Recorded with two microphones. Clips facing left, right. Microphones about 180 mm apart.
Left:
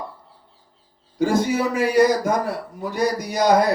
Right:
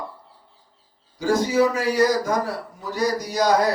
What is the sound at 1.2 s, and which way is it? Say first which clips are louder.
A man's voice: right 1 dB; 55° left (ahead or behind).